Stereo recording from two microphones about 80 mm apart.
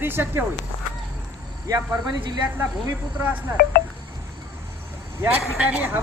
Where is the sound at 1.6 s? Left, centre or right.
Right.